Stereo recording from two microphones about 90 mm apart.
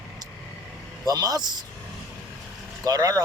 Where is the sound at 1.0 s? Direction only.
45° right (ahead or behind).